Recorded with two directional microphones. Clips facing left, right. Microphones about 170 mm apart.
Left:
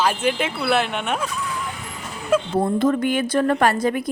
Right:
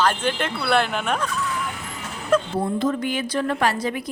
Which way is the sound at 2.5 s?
50° left (ahead or behind).